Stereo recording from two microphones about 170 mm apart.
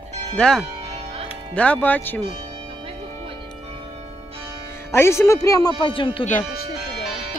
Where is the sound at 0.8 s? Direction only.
40° right (ahead or behind).